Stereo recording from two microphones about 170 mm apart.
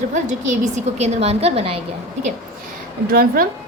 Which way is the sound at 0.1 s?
45° right (ahead or behind).